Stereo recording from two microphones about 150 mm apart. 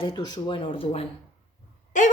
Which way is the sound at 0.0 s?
30° left (ahead or behind).